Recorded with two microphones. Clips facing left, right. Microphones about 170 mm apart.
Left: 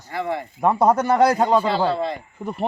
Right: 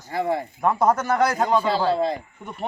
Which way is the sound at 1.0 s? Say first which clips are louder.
Left 4 dB; 30° left (ahead or behind).